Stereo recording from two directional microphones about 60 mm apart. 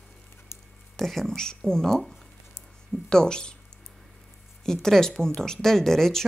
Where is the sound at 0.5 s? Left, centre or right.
Left.